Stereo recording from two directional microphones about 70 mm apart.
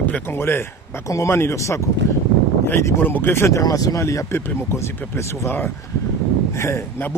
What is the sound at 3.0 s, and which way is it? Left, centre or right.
Speech, left.